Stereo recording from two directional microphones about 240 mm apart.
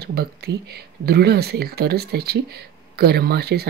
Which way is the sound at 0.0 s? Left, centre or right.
Right.